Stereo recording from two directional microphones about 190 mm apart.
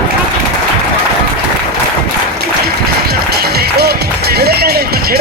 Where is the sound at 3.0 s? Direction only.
55° right (ahead or behind).